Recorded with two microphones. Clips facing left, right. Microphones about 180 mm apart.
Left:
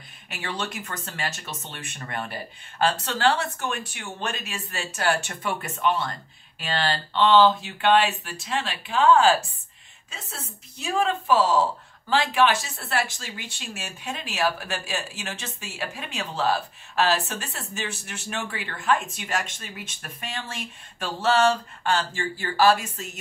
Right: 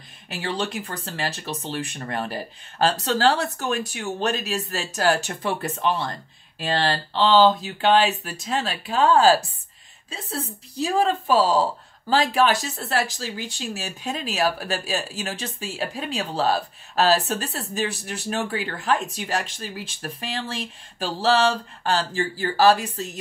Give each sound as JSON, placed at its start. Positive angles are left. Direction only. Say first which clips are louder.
{"t": 0.3, "sound": "a woman's voice", "louder": "right 5 dB", "side_deg": -35}